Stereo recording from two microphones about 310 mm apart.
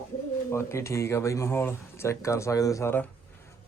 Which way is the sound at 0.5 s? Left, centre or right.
Centre.